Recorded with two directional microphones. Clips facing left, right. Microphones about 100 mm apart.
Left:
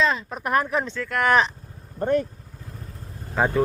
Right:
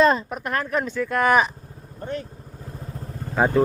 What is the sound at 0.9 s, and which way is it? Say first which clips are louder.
Speech: right 2 dB; 15° right (ahead or behind).